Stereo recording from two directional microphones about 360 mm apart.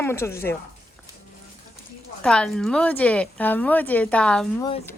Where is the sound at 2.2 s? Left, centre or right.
Centre.